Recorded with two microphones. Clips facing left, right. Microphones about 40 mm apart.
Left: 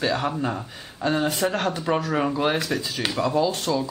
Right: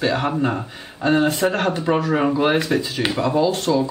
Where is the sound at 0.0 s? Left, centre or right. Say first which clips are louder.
Right 4 dB; centre.